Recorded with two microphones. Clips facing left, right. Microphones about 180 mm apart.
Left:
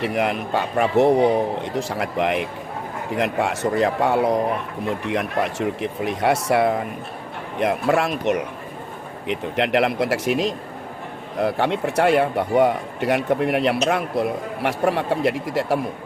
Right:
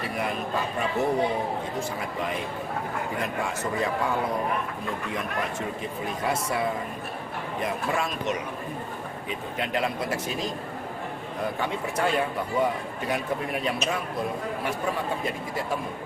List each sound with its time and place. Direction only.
0.0 s speech: 75° left (ahead or behind)